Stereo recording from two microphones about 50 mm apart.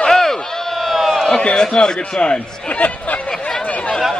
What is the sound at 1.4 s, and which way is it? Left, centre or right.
A man's voice, centre.